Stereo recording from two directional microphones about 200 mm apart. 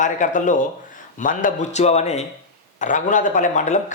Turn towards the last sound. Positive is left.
turn(degrees=35)  # may be behind; listen again after turning